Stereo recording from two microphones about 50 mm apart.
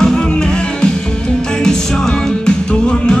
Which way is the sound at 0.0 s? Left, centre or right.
Centre.